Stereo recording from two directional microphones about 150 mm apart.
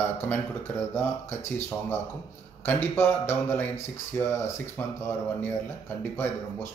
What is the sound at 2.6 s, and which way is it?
Speech, 15° left (ahead or behind).